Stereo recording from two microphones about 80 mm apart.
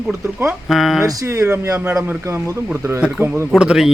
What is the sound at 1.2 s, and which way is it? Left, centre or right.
Speech, right.